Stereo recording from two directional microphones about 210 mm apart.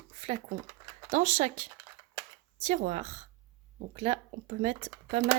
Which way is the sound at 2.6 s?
35° right (ahead or behind).